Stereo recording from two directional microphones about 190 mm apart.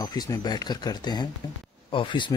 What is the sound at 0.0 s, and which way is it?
Speech, 20° left (ahead or behind).